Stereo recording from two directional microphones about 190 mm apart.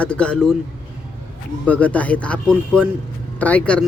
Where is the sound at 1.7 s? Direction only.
10° left (ahead or behind).